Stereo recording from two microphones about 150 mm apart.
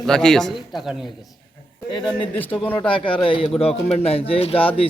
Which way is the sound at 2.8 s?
35° left (ahead or behind).